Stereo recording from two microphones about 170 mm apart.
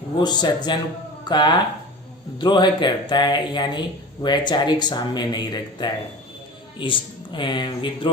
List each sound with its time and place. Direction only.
0.2 s speech: 25° left (ahead or behind)